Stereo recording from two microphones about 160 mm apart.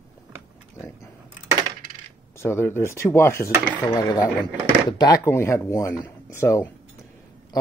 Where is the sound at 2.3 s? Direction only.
15° left (ahead or behind).